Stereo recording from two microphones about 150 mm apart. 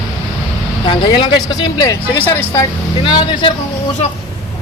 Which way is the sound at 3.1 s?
30° left (ahead or behind).